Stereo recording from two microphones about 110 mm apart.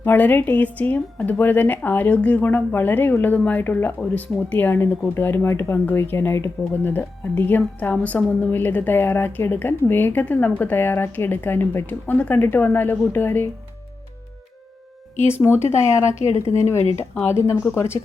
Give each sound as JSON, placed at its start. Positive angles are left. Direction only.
{"t": 0.0, "sound": "a woman's voice", "side_deg": 20}
{"t": 15.3, "sound": "speech", "side_deg": 20}
{"t": 16.2, "sound": "speech", "side_deg": 70}
{"t": 17.2, "sound": "speech", "side_deg": 25}